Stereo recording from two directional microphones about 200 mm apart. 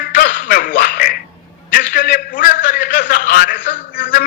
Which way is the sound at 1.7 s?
45° left (ahead or behind).